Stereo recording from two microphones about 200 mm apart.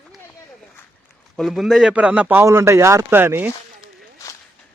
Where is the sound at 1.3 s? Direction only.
Centre (ahead or behind).